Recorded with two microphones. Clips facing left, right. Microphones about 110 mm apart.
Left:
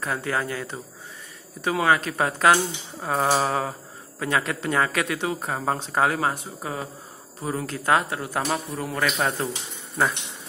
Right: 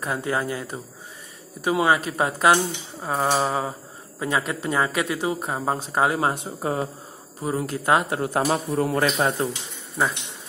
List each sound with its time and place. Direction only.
0.0 s speech: 15° right (ahead or behind)
6.1 s speech: 25° right (ahead or behind)
7.4 s speech: 15° right (ahead or behind)
8.1 s speech: 30° right (ahead or behind)
10.0 s speech: 5° right (ahead or behind)